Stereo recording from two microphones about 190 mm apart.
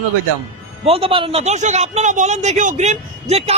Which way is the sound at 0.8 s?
30° right (ahead or behind).